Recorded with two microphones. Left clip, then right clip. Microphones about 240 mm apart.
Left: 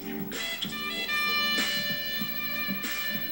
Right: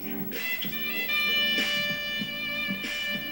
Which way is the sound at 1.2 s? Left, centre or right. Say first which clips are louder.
Right 2 dB; centre.